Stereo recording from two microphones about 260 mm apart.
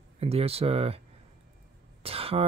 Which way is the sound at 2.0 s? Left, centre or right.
Right.